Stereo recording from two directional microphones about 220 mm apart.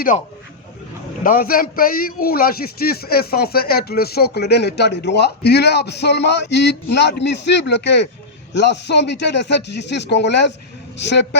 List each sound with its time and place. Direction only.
1.2 s a man's voice: 40° left (ahead or behind)